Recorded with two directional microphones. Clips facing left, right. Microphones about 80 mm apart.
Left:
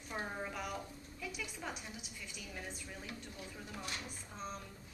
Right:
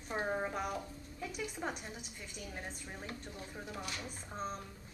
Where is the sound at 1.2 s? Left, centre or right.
Right.